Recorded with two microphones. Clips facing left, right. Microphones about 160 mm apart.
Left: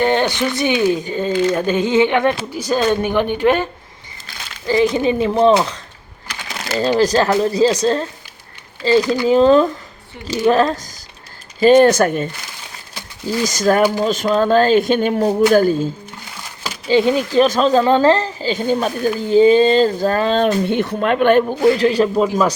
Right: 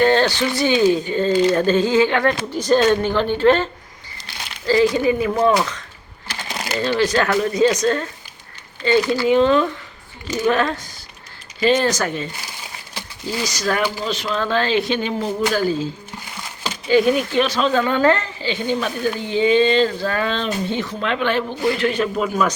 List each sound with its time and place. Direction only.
0.0 s speech: 15° left (ahead or behind)
7.0 s speech: 35° left (ahead or behind)
13.4 s speech: 45° left (ahead or behind)
16.9 s speech: 25° left (ahead or behind)
20.4 s speech: 60° left (ahead or behind)
21.8 s speech: 35° left (ahead or behind)